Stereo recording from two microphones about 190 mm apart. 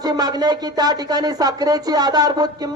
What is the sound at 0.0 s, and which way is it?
Speech, 20° right (ahead or behind).